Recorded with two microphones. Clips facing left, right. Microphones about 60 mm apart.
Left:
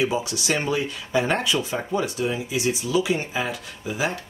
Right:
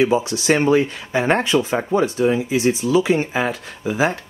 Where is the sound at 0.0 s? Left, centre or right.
Right.